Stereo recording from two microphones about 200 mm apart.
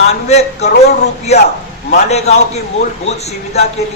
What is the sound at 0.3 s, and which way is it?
A man's voice, 35° left (ahead or behind).